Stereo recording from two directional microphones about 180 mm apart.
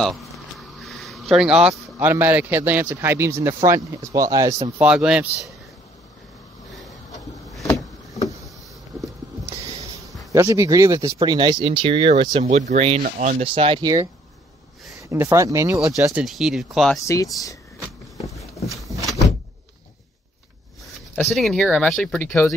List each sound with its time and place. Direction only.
0.0 s speech: centre (ahead or behind); by 4.6 s 20° right (ahead or behind)
4.7 s speech: 5° right (ahead or behind)
10.3 s speech: 15° right (ahead or behind)
16.0 s speech: 5° right (ahead or behind)
17.0 s speech: 20° left (ahead or behind)
18.7 s a sound: centre (ahead or behind)
21.4 s speech: centre (ahead or behind)